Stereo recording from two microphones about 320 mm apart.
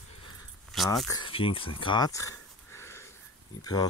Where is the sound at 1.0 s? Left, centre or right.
Centre.